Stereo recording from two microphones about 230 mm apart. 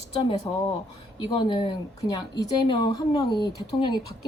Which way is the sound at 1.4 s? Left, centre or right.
Left.